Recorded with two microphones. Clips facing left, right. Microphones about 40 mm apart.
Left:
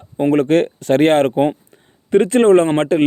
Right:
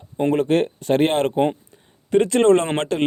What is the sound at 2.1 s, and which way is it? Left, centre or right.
Speech, left.